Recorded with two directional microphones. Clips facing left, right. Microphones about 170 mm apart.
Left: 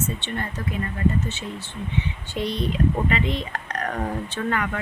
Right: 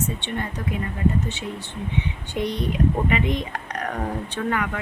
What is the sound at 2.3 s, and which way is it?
Speech, 15° right (ahead or behind).